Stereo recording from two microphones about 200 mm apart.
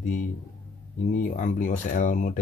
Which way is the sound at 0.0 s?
40° left (ahead or behind).